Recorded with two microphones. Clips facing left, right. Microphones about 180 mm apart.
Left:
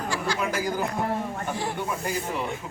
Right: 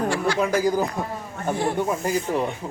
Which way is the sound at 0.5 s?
40° right (ahead or behind).